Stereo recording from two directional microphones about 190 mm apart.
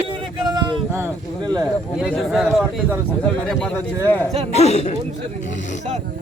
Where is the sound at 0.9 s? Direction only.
10° right (ahead or behind).